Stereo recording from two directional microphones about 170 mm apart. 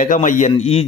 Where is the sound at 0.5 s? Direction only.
35° left (ahead or behind).